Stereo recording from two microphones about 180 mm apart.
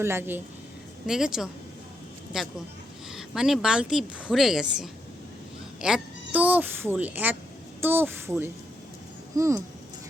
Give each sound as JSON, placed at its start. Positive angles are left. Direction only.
{"t": 0.0, "sound": "a woman's voice", "side_deg": -15}